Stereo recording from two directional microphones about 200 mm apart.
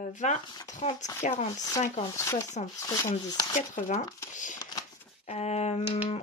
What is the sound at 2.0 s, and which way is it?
Speech, 15° left (ahead or behind).